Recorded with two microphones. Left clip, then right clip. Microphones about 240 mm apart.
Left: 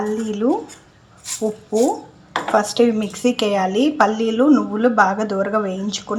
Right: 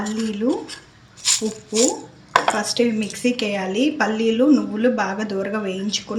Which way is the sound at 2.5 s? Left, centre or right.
Centre.